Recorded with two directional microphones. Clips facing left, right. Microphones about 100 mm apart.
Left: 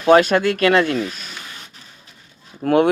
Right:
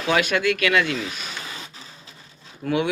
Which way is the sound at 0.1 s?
40° left (ahead or behind).